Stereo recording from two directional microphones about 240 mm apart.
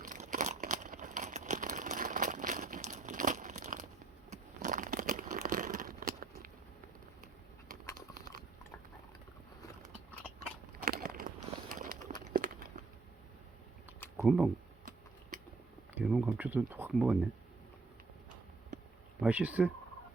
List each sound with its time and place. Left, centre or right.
0.0 s crumpling: right
10.9 s a sound: right
14.2 s speech: centre
16.0 s speech: centre
19.2 s speech: centre